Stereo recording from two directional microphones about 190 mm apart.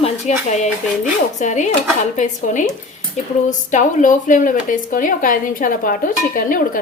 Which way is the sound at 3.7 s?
40° left (ahead or behind).